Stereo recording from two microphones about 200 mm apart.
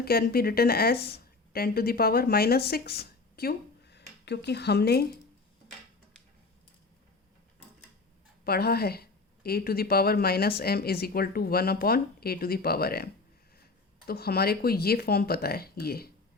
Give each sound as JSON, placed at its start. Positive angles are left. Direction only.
{"t": 0.0, "sound": "speech", "side_deg": 50}
{"t": 8.4, "sound": "a woman's voice", "side_deg": 50}
{"t": 14.1, "sound": "speech", "side_deg": 50}